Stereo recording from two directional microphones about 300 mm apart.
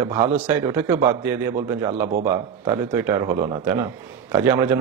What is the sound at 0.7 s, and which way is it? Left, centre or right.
Speech, centre.